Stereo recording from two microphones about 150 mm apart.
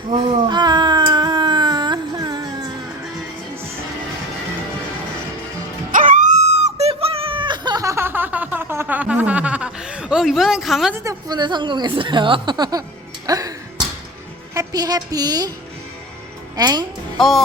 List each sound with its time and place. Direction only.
0.4 s cat: 30° right (ahead or behind)
5.9 s wail: 65° right (ahead or behind); by 10.9 s centre (ahead or behind)
10.9 s a woman's voice: 20° right (ahead or behind)
13.2 s music: 25° right (ahead or behind)
14.5 s a woman's voice: 25° right (ahead or behind)
16.6 s a woman's voice: 25° right (ahead or behind)
17.2 s music: centre (ahead or behind)